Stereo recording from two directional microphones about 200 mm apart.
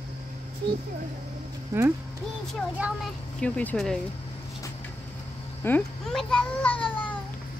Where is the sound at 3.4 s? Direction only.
5° left (ahead or behind).